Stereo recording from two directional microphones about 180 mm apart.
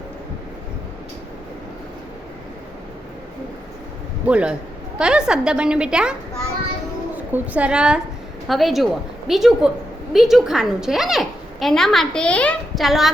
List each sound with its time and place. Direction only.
4.3 s a man's voice: 5° right (ahead or behind)